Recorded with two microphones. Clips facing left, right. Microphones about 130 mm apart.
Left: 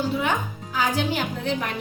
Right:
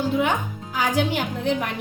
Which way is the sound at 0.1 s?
15° right (ahead or behind).